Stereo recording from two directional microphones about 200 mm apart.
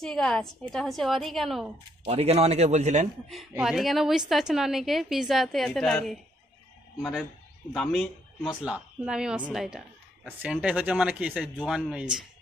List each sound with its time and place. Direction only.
0.0 s speech: centre (ahead or behind)
2.0 s a man's voice: 30° right (ahead or behind)
3.3 s speech: centre (ahead or behind)
8.5 s speech: 5° right (ahead or behind)